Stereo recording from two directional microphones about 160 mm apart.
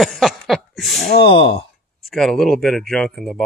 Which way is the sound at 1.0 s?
90° left.